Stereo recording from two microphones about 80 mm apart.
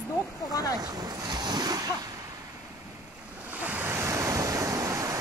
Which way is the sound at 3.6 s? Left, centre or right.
Right.